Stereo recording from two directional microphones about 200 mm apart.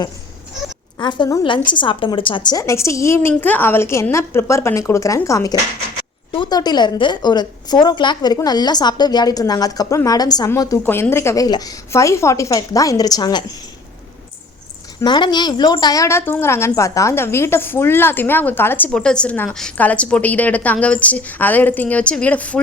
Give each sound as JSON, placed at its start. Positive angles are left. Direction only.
{"t": 0.9, "sound": "a woman's voice", "side_deg": 20}
{"t": 15.0, "sound": "a woman's voice", "side_deg": 20}